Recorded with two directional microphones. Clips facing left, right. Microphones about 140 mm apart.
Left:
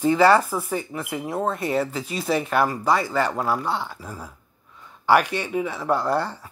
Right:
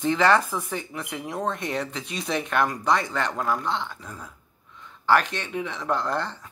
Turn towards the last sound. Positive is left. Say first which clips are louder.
# left 4 dB
turn(degrees=10)  # may be behind; listen again after turning